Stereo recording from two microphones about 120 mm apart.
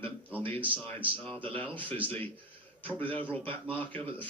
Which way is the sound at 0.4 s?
15° left (ahead or behind).